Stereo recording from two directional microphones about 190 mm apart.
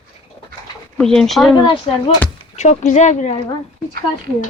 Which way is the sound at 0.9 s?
5° left (ahead or behind).